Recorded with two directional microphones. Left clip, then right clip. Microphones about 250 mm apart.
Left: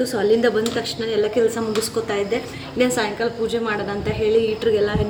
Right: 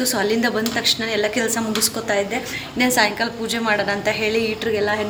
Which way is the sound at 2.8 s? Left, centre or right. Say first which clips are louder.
Right 2 dB; centre.